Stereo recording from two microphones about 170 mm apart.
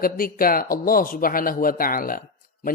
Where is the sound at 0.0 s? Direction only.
60° left (ahead or behind).